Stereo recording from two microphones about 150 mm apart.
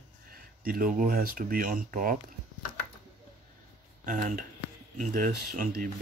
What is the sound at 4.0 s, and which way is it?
Speech, 60° right (ahead or behind).